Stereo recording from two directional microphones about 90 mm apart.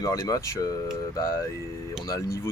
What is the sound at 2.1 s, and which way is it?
Speech, 35° left (ahead or behind).